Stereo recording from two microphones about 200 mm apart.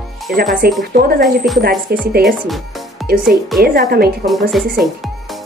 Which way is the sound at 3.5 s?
50° right (ahead or behind).